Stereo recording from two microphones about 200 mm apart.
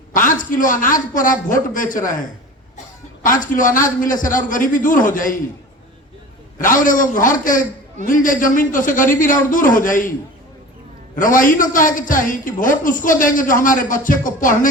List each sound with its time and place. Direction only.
0.1 s a man's voice: 40° left (ahead or behind)
3.2 s a man's voice: 45° left (ahead or behind)
6.6 s a man's voice: 40° left (ahead or behind)
11.1 s a man's voice: 40° left (ahead or behind)